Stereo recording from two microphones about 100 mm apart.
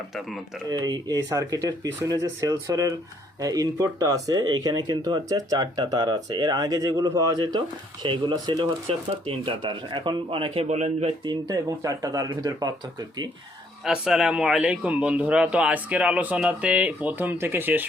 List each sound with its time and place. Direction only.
0.7 s speech: 45° right (ahead or behind)
8.9 s speech: 60° right (ahead or behind); by 11.1 s 85° right
11.3 s speech: 40° right (ahead or behind)
13.8 s speech: 5° right (ahead or behind)